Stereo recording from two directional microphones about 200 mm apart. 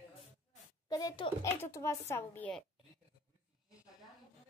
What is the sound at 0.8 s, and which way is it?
Speech, 20° left (ahead or behind).